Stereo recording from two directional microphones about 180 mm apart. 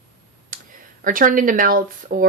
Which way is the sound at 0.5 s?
50° right (ahead or behind).